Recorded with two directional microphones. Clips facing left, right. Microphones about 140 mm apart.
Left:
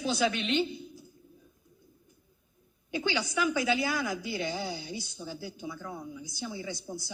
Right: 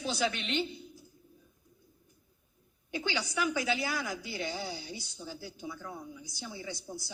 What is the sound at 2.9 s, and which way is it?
Speech, 20° left (ahead or behind).